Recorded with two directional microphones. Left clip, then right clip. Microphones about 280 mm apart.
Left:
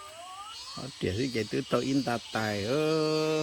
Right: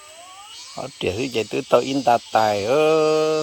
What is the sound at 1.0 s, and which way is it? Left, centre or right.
Speech, centre.